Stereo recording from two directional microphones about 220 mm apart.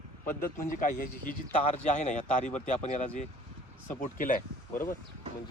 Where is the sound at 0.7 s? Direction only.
40° left (ahead or behind).